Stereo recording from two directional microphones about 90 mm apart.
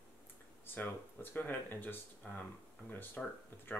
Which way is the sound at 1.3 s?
20° left (ahead or behind).